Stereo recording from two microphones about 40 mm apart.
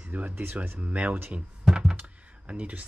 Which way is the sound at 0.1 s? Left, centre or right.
Right.